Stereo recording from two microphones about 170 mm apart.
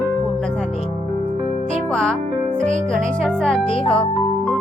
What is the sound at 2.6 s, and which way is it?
Music, 45° right (ahead or behind).